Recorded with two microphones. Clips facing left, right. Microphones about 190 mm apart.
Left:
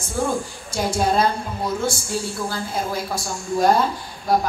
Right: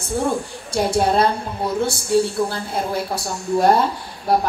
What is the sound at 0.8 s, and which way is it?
A woman's voice, 60° right (ahead or behind).